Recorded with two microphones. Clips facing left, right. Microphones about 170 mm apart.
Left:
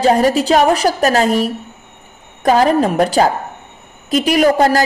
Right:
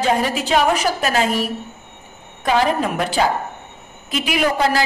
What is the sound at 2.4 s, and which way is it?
A woman's voice, 40° left (ahead or behind).